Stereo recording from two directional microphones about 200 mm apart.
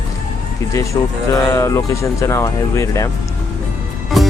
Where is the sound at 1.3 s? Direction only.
15° left (ahead or behind).